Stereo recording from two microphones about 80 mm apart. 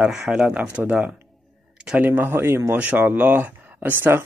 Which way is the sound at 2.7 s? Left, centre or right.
Centre.